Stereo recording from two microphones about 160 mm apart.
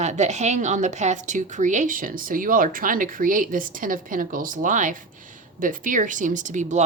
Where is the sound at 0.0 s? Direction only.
45° right (ahead or behind).